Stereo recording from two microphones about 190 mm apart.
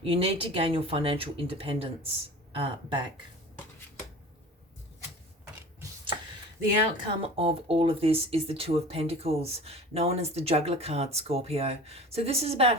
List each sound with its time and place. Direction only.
0.0 s speech: 30° right (ahead or behind)
7.2 s speech: 30° right (ahead or behind)